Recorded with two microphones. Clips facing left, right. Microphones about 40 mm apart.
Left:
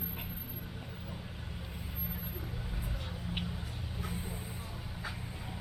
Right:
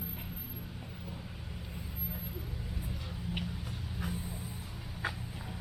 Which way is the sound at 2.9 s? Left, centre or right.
Left.